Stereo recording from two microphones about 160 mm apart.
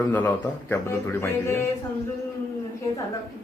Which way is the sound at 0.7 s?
15° left (ahead or behind).